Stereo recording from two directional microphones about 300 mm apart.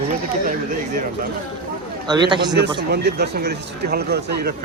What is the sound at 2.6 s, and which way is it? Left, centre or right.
Speech, right.